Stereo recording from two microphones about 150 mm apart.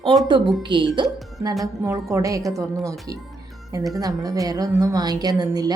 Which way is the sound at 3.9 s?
25° right (ahead or behind).